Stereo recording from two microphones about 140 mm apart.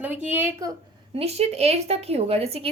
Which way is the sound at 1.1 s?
45° right (ahead or behind).